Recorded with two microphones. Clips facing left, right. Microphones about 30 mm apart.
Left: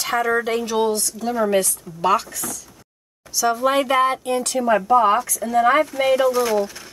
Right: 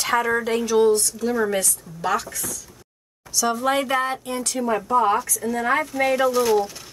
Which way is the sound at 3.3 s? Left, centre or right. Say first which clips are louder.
Left 3 dB; centre.